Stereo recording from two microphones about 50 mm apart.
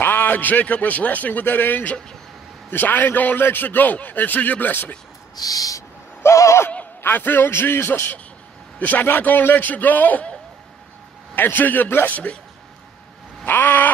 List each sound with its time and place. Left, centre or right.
0.0 s a man's voice: left
5.8 s neigh: left
7.0 s a man's voice: left
8.7 s a man's voice: left
11.3 s a man's voice: left
12.1 s a man's voice: left
13.5 s a man's voice: left